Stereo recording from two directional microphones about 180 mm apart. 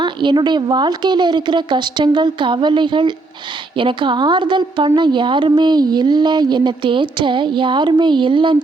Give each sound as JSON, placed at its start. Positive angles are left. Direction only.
{"t": 0.0, "sound": "a woman's voice", "side_deg": -25}